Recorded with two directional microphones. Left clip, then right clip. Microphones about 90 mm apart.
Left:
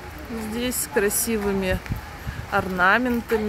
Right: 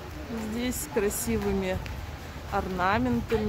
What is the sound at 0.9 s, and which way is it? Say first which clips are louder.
Speech: left 6 dB; 25° left (ahead or behind).